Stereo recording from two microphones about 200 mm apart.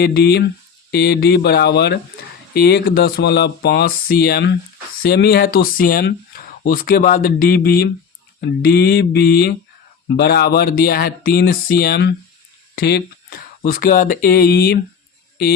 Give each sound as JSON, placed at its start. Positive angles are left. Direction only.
{"t": 0.0, "sound": "speech", "side_deg": 55}